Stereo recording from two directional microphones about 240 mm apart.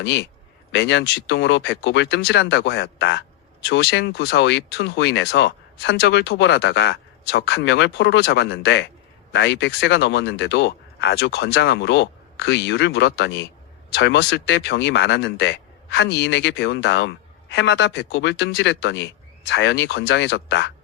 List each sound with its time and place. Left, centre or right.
0.0 s speech: left